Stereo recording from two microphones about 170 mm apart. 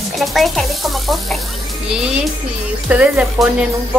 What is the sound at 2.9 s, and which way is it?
Speech, 5° right (ahead or behind).